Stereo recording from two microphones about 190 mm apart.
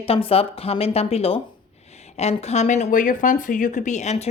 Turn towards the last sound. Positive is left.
turn(degrees=35)  # may be behind; listen again after turning